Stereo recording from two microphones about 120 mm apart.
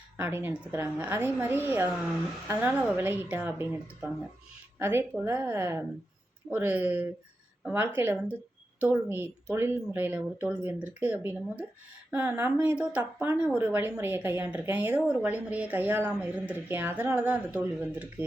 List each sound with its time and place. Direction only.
0.2 s a woman's voice: 20° right (ahead or behind)
4.8 s a woman's voice: 20° right (ahead or behind)